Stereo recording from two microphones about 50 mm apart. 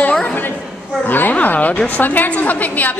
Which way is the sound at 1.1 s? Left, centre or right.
Left.